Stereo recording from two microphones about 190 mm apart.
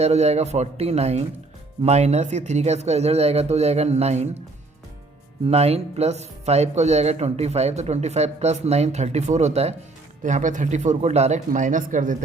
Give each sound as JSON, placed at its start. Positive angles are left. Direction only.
{"t": 0.0, "sound": "speech", "side_deg": -35}
{"t": 5.5, "sound": "speech", "side_deg": -35}